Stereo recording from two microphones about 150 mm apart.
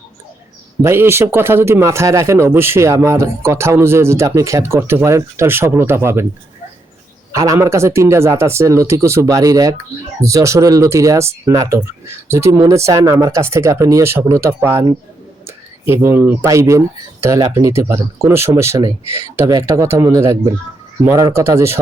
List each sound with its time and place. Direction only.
0.8 s speech: 15° right (ahead or behind)
7.3 s speech: 20° right (ahead or behind)